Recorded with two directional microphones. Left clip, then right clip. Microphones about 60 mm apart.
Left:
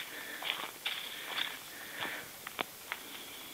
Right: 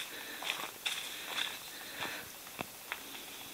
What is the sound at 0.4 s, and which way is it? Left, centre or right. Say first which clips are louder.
Walk: even; right.